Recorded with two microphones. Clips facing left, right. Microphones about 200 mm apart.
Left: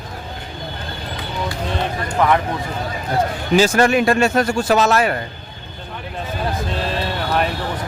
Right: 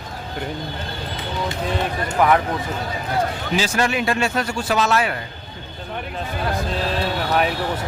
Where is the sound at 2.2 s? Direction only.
10° right (ahead or behind).